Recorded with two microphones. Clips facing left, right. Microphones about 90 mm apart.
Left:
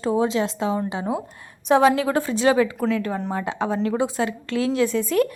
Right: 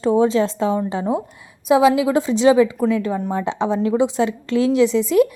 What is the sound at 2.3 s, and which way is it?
Speech, 20° right (ahead or behind).